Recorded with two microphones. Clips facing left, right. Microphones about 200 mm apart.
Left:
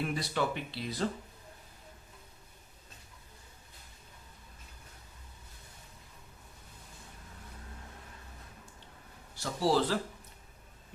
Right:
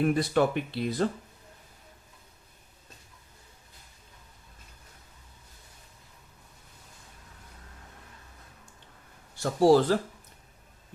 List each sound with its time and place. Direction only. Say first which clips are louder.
0.0 s speech: right 9 dB; 50° right (ahead or behind)
9.3 s speech: right 9 dB; 50° right (ahead or behind)